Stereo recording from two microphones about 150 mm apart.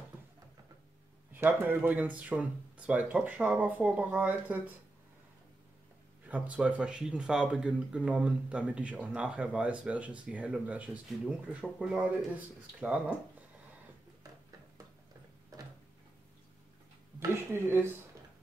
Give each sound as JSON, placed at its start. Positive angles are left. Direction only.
{"t": 1.3, "sound": "speech", "side_deg": -10}
{"t": 6.2, "sound": "speech", "side_deg": -10}
{"t": 17.2, "sound": "a sound", "side_deg": -15}